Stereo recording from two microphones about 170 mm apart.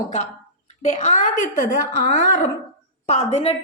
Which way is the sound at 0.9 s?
45° left (ahead or behind).